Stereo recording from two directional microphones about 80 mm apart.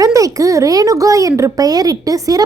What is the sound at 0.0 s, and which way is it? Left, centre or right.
Speech, right.